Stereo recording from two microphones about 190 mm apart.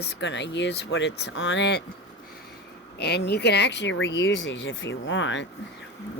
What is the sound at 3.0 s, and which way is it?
Speech, 60° left (ahead or behind).